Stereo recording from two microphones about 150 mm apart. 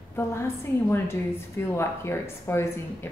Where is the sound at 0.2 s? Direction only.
20° left (ahead or behind).